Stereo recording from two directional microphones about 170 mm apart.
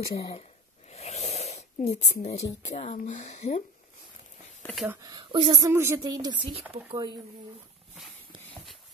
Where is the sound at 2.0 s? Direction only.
40° left (ahead or behind).